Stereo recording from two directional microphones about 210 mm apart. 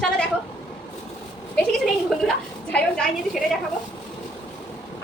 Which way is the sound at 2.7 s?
5° left (ahead or behind).